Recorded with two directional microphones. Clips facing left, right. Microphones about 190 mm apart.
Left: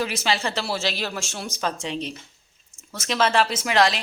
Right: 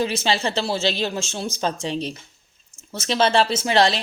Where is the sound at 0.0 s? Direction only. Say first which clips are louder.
Right 3 dB; 25° right (ahead or behind).